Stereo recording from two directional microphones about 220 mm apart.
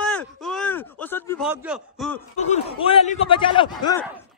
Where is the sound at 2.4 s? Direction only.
30° left (ahead or behind).